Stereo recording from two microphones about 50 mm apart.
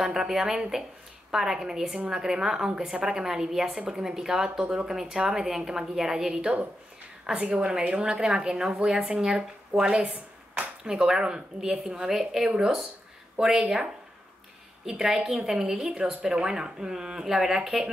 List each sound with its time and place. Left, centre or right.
0.0 s a woman's voice: centre
14.9 s speech: centre